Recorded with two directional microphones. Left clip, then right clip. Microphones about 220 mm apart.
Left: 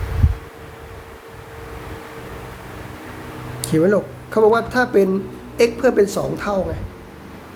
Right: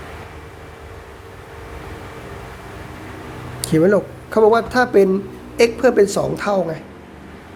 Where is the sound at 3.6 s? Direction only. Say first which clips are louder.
Right 2 dB; 30° right (ahead or behind).